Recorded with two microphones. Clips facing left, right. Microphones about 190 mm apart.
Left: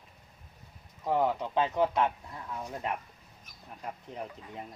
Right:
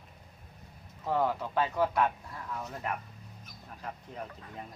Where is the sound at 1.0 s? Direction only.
15° left (ahead or behind).